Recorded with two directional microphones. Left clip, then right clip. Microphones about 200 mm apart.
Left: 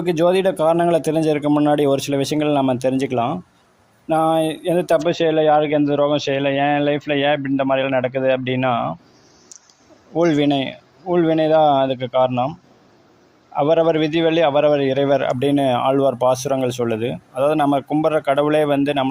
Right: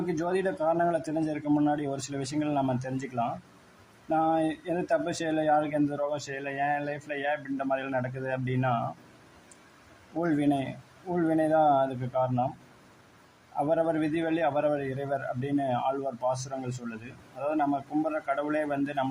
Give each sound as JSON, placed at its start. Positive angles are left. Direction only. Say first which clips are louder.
{"t": 0.1, "sound": "speech", "louder": "left 15 dB", "side_deg": 40}
{"t": 10.2, "sound": "speech", "louder": "left 11 dB", "side_deg": 40}
{"t": 13.6, "sound": "speech", "louder": "left 11 dB", "side_deg": 40}